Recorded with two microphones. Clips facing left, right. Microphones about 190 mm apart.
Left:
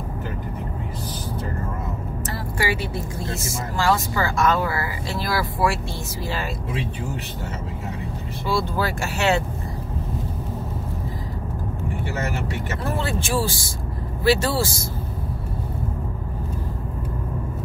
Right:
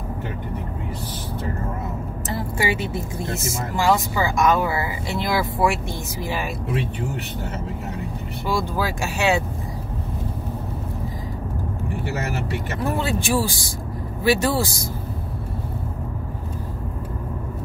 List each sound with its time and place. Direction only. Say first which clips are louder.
2.6 s speech: even; 20° right (ahead or behind)
8.5 s speech: even; 15° right (ahead or behind)
12.9 s speech: right 2 dB; 15° right (ahead or behind)